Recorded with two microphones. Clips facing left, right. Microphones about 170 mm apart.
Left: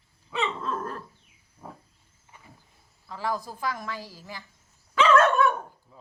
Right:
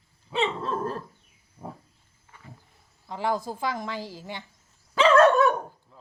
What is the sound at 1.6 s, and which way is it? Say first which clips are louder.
Cricket: right 4 dB; 20° right (ahead or behind).